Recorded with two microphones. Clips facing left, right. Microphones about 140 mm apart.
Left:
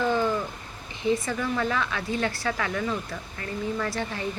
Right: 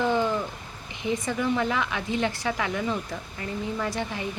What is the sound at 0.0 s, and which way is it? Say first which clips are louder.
Bird: even; 15° right (ahead or behind).